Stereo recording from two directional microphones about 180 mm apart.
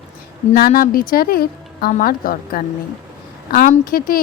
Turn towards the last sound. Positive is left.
turn(degrees=50)  # may be behind; listen again after turning